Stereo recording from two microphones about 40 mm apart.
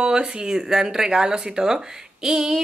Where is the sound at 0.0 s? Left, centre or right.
Right.